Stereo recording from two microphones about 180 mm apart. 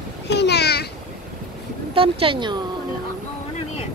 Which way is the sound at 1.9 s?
30° right (ahead or behind).